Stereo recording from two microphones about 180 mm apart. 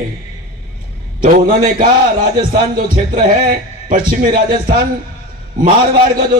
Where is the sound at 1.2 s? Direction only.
50° right (ahead or behind).